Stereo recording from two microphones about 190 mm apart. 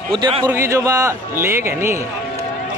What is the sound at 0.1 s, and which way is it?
Speech, 25° right (ahead or behind).